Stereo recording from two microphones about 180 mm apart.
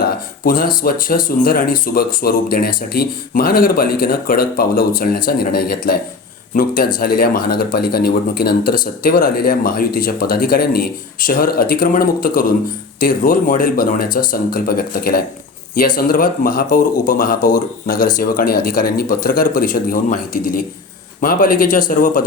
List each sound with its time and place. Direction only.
0.0 s speech: 55° left (ahead or behind)